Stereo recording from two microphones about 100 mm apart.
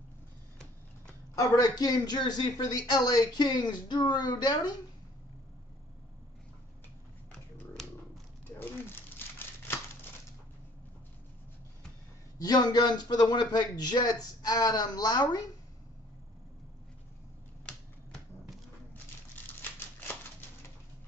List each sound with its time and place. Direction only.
1.3 s a man's voice: 40° left (ahead or behind)
8.5 s crumpling: 20° left (ahead or behind)
12.4 s a man's voice: 40° left (ahead or behind)
19.6 s typewriter: 20° left (ahead or behind)